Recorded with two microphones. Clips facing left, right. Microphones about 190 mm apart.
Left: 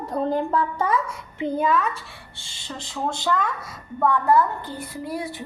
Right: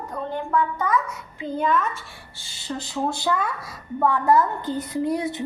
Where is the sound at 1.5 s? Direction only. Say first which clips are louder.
Left 1 dB; 10° left (ahead or behind).